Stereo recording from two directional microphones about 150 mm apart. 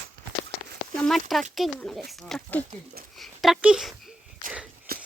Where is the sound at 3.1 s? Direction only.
Centre (ahead or behind).